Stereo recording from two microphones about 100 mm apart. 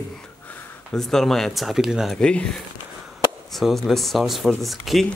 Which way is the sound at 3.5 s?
Centre (ahead or behind).